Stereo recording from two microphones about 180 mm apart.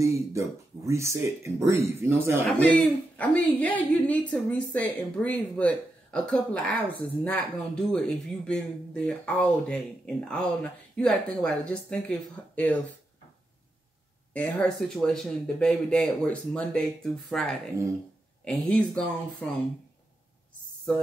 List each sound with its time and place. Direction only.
0.0 s speech: 15° right (ahead or behind)
2.4 s a woman's voice: 5° left (ahead or behind)
14.3 s speech: 10° left (ahead or behind)